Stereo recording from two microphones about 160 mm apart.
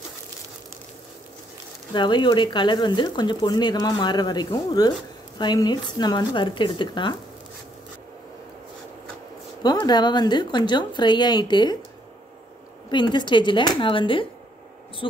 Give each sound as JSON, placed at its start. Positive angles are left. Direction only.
{"t": 2.0, "sound": "speech", "side_deg": 30}
{"t": 9.6, "sound": "speech", "side_deg": 25}
{"t": 12.9, "sound": "speech", "side_deg": 30}